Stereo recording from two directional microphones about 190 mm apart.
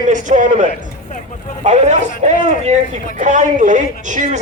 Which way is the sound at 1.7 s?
35° right (ahead or behind).